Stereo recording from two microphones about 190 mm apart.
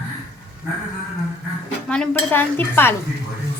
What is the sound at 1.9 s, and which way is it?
Dishes, 10° left (ahead or behind).